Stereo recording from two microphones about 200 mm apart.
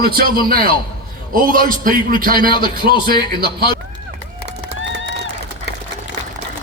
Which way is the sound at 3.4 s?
50° right (ahead or behind).